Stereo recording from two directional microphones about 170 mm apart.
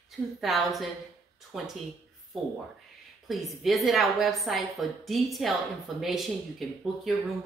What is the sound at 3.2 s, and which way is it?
Speech, centre (ahead or behind).